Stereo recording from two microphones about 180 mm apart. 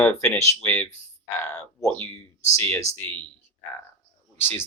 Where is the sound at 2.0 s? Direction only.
15° left (ahead or behind).